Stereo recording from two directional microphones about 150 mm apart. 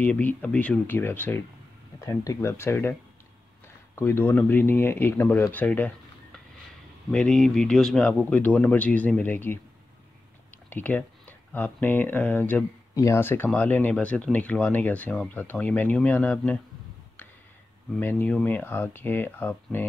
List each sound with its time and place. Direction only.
0.0 s speech: 10° left (ahead or behind)
10.7 s speech: 10° left (ahead or behind)
17.9 s speech: 10° left (ahead or behind)